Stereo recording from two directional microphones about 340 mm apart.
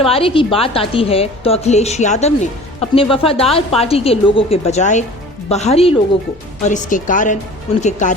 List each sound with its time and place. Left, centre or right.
0.0 s a woman's voice: centre